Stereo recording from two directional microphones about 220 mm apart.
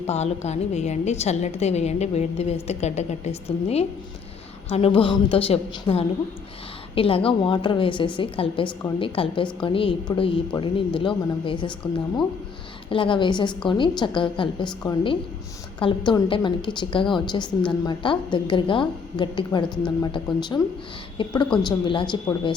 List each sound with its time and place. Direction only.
0.1 s a woman's voice: 30° left (ahead or behind)